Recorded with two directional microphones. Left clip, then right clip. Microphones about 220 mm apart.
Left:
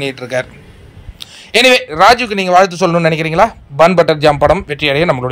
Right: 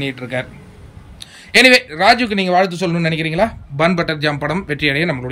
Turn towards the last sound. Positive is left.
turn(degrees=15)  # may be behind; listen again after turning